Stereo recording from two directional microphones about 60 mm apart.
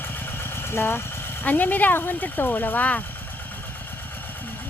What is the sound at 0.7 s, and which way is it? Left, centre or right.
Speech, left.